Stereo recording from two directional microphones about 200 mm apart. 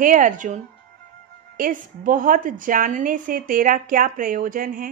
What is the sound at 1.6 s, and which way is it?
A woman's voice, 45° right (ahead or behind).